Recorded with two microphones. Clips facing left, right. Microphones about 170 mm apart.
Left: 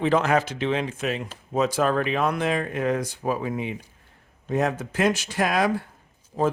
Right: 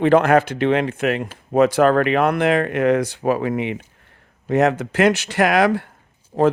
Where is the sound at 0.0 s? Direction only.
60° right (ahead or behind).